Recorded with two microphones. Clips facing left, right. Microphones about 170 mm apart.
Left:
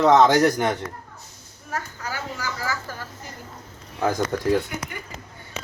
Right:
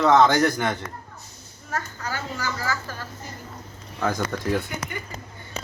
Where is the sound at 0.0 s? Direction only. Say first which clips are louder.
Left 2 dB; 15° left (ahead or behind).